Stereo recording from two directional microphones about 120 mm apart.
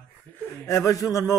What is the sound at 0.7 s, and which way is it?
Speech, 25° left (ahead or behind).